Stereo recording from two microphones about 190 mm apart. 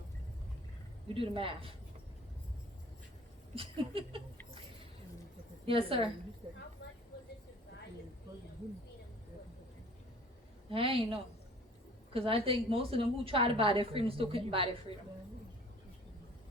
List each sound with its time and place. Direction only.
1.0 s a woman's voice: 30° right (ahead or behind)
3.5 s a woman's voice: 30° right (ahead or behind)
5.6 s a woman's voice: 30° right (ahead or behind)
6.8 s a sound: 60° left (ahead or behind)
10.7 s a woman's voice: 30° right (ahead or behind)